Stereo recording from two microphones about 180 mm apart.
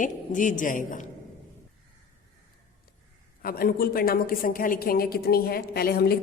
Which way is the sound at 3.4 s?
55° left (ahead or behind).